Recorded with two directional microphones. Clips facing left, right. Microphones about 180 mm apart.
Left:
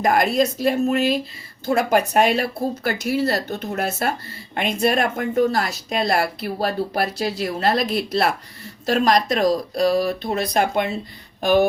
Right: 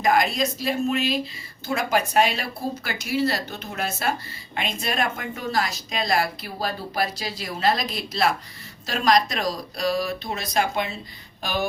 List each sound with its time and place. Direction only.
0.0 s speech: 55° left (ahead or behind)